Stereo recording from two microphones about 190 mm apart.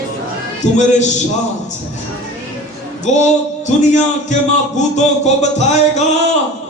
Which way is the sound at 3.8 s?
40° left (ahead or behind).